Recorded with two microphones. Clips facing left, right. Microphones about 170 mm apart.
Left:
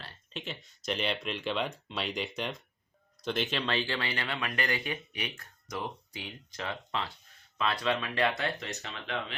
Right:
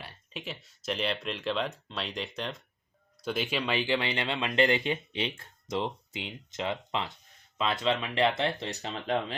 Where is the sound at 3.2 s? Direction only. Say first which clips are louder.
Right 1 dB; 10° right (ahead or behind); by 9.4 s 35° right (ahead or behind).